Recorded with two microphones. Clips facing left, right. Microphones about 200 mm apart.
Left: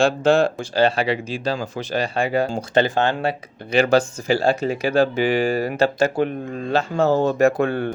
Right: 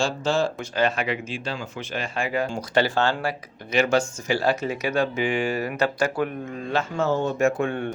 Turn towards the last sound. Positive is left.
turn(degrees=35)  # may be behind; listen again after turning